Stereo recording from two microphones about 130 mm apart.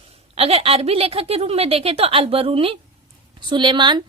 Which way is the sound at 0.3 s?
50° right (ahead or behind).